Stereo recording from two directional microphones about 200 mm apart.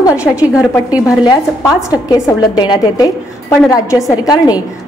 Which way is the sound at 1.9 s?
20° left (ahead or behind).